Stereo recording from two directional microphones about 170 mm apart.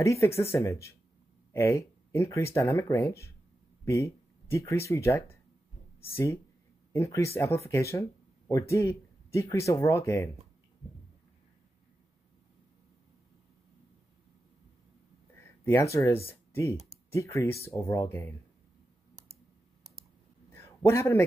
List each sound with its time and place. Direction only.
0.0 s speech: 20° left (ahead or behind)
15.4 s speech: 15° left (ahead or behind)
20.5 s a sound: 15° left (ahead or behind)